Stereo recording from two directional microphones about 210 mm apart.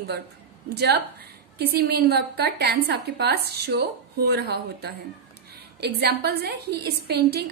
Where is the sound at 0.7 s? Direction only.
50° right (ahead or behind).